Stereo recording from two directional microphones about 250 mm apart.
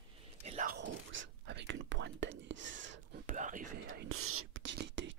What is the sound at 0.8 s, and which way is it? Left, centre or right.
Whispering, right.